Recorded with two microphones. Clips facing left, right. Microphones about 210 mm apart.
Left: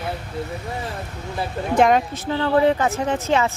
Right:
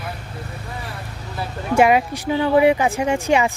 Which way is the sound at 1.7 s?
10° right (ahead or behind).